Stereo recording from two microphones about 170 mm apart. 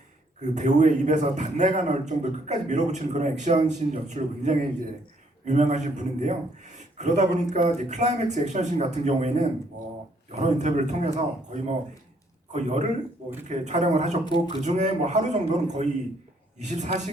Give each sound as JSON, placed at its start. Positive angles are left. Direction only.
{"t": 0.4, "sound": "a man's voice", "side_deg": -45}
{"t": 12.5, "sound": "a man's voice", "side_deg": -40}
{"t": 14.3, "sound": "speech", "side_deg": 25}
{"t": 14.5, "sound": "a man's voice", "side_deg": -45}